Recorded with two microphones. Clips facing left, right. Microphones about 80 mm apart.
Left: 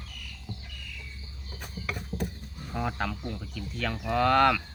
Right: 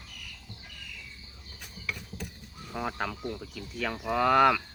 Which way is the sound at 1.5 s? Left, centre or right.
Left.